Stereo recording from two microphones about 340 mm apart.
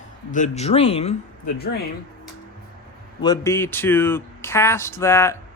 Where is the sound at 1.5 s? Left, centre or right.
Left.